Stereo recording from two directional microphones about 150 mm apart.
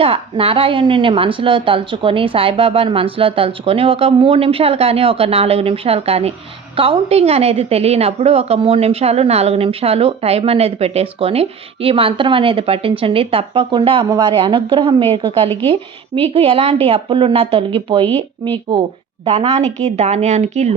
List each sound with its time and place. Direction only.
0.0 s a woman's voice: 40° right (ahead or behind)
19.2 s a woman's voice: 40° right (ahead or behind)